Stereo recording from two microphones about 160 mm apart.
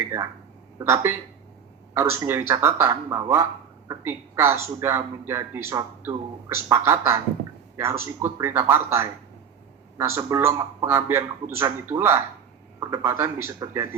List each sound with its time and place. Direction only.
0.1 s a man's voice: 15° right (ahead or behind)